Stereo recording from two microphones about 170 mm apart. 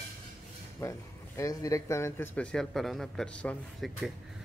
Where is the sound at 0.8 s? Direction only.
15° left (ahead or behind).